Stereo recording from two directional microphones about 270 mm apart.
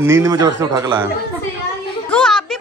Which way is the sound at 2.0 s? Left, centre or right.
Centre.